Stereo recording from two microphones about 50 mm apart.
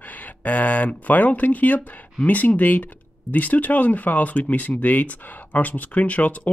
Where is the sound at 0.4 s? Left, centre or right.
Left.